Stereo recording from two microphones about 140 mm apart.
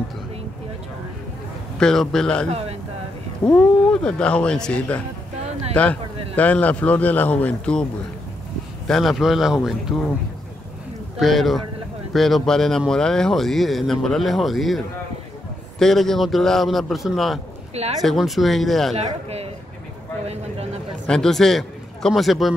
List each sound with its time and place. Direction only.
1.8 s speech: 5° left (ahead or behind)
2.5 s speech: 45° right (ahead or behind)
3.4 s speech: 5° left (ahead or behind)
8.8 s speech: centre (ahead or behind)
11.1 s speech: centre (ahead or behind)
15.8 s speech: 5° left (ahead or behind)
18.9 s speech: 45° right (ahead or behind)
21.1 s a man's voice: 5° left (ahead or behind)